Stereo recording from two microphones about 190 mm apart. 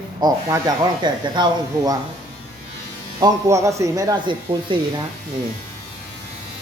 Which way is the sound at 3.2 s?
15° right (ahead or behind).